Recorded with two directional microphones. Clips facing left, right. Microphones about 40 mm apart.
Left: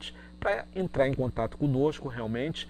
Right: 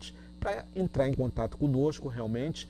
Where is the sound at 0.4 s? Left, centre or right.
Left.